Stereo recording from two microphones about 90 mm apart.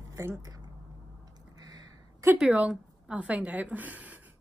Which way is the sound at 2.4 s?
10° right (ahead or behind).